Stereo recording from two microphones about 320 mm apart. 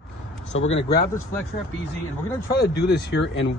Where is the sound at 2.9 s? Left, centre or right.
Left.